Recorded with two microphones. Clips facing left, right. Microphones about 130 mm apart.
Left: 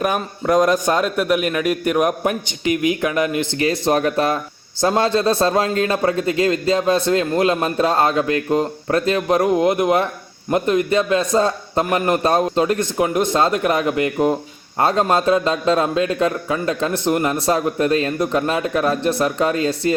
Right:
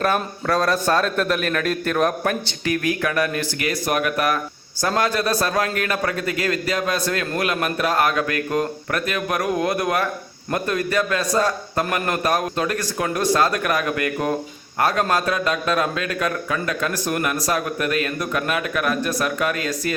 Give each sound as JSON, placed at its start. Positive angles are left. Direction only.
{"t": 0.0, "sound": "a man's voice", "side_deg": 15}